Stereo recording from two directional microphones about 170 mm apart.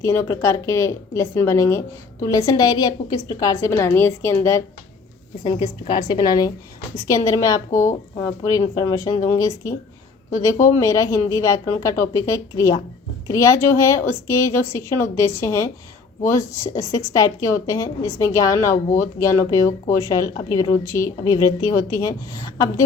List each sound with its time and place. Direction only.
0.0 s a woman's voice: 15° left (ahead or behind)
5.5 s a woman's voice: 25° left (ahead or behind)
10.8 s a woman's voice: 20° left (ahead or behind)